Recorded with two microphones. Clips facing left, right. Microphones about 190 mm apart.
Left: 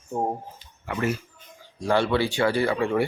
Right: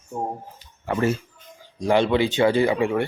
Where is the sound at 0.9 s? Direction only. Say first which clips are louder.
Right 4 dB; 30° right (ahead or behind).